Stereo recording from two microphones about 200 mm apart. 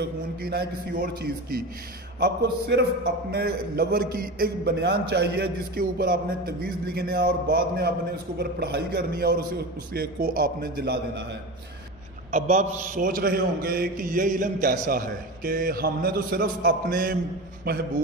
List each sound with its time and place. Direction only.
0.0 s a man's voice: 50° right (ahead or behind)
2.1 s a man's voice: 60° right (ahead or behind)
12.3 s a man's voice: 40° right (ahead or behind)